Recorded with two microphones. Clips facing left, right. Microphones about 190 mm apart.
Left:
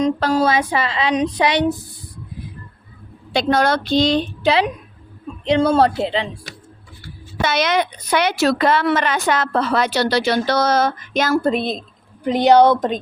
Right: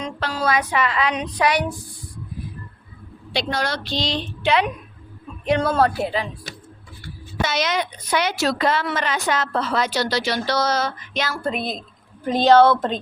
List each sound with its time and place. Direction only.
0.0 s speech: 40° left (ahead or behind)
3.3 s speech: 55° left (ahead or behind)
4.4 s a woman's voice: 35° left (ahead or behind)
7.4 s a woman's voice: 60° left (ahead or behind)
11.5 s a woman's voice: 25° left (ahead or behind)